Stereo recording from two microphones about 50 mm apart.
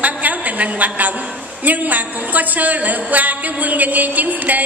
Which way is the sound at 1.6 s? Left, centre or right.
Right.